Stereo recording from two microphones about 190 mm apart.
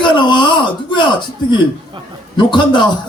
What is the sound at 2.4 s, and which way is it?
Speech, 25° left (ahead or behind).